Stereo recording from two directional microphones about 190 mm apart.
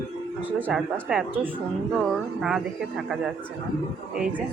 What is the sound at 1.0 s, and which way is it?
Speech, 5° right (ahead or behind).